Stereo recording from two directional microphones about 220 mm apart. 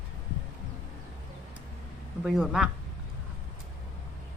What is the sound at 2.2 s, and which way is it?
Speech, centre (ahead or behind).